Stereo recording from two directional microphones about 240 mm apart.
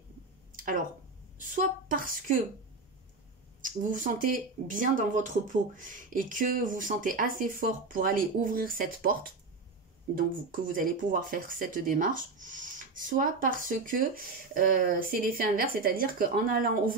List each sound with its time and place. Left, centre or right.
0.5 s a sound: right
1.4 s speech: right
3.6 s speech: right